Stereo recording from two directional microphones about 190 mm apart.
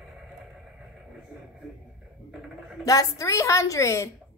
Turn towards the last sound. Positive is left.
turn(degrees=15)  # may be behind; listen again after turning